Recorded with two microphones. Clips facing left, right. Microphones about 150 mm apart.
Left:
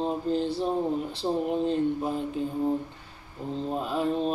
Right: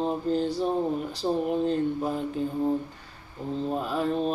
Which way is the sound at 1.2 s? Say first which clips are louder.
Right 1 dB; 5° left (ahead or behind).